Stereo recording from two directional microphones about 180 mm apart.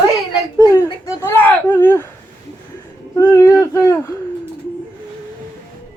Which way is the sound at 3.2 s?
15° left (ahead or behind).